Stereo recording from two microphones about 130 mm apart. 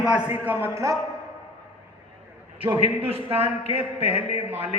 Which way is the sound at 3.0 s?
50° right (ahead or behind).